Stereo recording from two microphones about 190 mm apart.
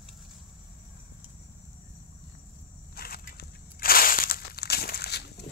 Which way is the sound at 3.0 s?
50° left (ahead or behind).